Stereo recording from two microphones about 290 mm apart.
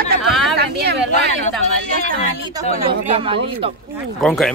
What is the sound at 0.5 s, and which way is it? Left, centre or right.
Speech, right.